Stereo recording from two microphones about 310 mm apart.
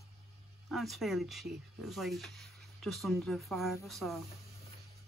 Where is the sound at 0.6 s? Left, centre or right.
Centre.